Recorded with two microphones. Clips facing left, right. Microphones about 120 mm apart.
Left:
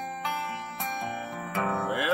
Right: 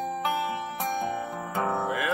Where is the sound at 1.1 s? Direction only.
20° right (ahead or behind).